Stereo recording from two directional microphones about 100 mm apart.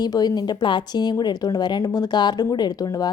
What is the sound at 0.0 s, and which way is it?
Speech, 45° left (ahead or behind).